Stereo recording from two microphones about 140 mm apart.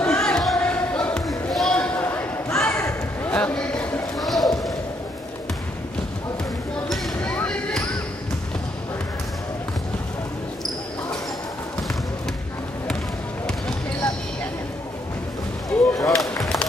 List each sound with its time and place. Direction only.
0.0 s basketball bounce: 5° left (ahead or behind)
3.3 s a sound: 10° left (ahead or behind)
6.9 s basketball bounce: 10° left (ahead or behind)
15.7 s music: 20° left (ahead or behind)
16.1 s run: 5° left (ahead or behind)